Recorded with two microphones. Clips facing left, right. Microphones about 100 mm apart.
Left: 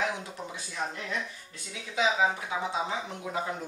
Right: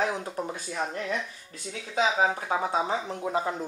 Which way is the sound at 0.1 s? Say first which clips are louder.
Right 5 dB; 45° right (ahead or behind).